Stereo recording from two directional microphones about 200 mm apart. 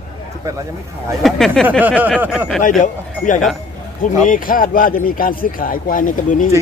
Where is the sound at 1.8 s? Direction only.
10° right (ahead or behind).